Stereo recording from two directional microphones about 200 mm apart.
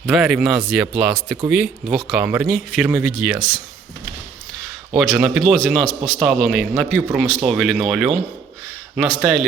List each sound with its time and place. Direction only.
0.0 s speech: centre (ahead or behind)
4.9 s speech: centre (ahead or behind)